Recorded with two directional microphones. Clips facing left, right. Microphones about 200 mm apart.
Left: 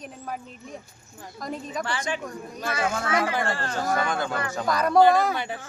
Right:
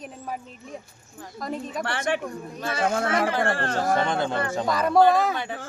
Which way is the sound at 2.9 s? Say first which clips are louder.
Right 3 dB; 50° right (ahead or behind).